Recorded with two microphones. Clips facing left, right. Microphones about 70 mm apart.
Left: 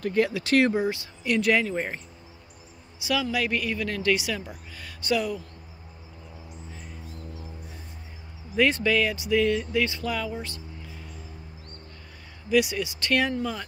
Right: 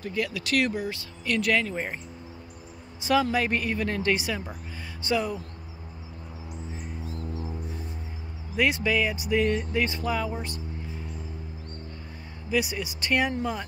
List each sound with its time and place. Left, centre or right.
0.2 s speech: left
1.2 s speech: centre
3.0 s speech: right
8.5 s speech: centre
12.5 s speech: centre